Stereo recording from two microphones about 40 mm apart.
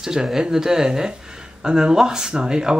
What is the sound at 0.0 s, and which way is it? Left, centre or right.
Speech, centre.